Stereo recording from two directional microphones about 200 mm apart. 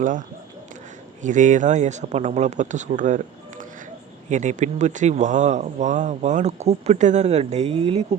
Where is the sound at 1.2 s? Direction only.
40° right (ahead or behind).